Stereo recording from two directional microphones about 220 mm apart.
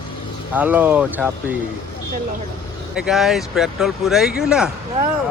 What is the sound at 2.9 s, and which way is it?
Speech, centre (ahead or behind).